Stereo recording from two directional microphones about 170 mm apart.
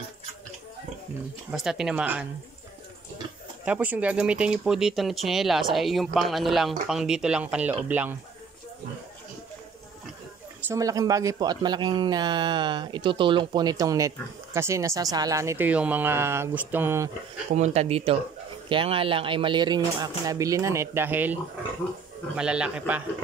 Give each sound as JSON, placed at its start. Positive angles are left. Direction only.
{"t": 1.5, "sound": "speech", "side_deg": -5}
{"t": 3.6, "sound": "a man's voice", "side_deg": -10}
{"t": 10.7, "sound": "speech", "side_deg": -20}
{"t": 17.5, "sound": "a man's voice", "side_deg": -40}